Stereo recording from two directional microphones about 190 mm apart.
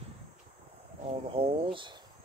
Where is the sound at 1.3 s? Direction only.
30° right (ahead or behind).